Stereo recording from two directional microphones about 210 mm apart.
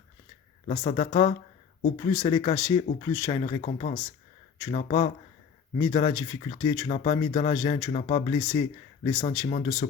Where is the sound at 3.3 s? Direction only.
30° left (ahead or behind).